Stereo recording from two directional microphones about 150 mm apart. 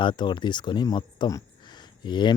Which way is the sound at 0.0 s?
30° left (ahead or behind).